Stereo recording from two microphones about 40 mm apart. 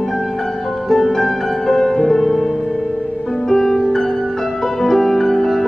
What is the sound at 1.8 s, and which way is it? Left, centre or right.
Music, left.